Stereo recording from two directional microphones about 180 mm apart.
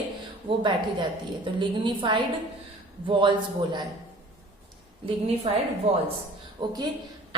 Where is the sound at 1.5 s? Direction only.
25° right (ahead or behind).